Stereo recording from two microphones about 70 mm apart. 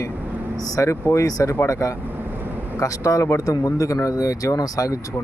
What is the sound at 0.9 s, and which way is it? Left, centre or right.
Speech, left.